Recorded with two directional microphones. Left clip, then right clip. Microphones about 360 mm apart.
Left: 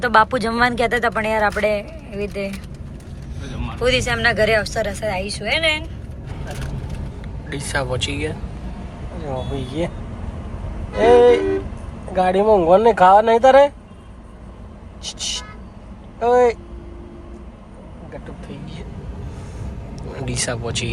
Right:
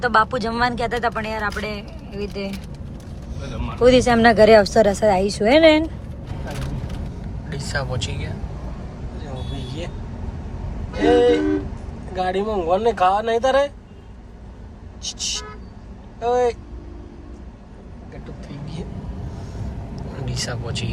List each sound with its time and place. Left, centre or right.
0.0 s speech: centre
7.5 s speech: centre
11.0 s speech: centre
15.0 s speech: centre
20.0 s speech: centre